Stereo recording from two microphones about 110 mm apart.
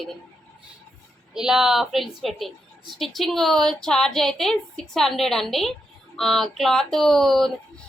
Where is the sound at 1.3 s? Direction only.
5° right (ahead or behind).